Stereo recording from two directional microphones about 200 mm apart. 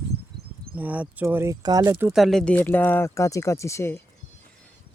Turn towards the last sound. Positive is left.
turn(degrees=10)  # may be behind; listen again after turning